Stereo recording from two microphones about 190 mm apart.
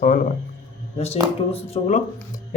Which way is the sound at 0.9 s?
35° left (ahead or behind).